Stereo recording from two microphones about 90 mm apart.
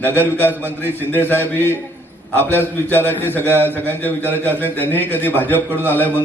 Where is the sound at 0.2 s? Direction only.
20° left (ahead or behind).